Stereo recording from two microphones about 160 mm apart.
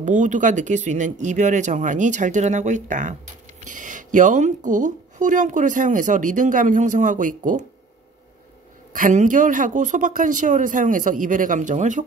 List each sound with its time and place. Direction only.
0.0 s speech: 50° right (ahead or behind)
8.9 s speech: 55° right (ahead or behind)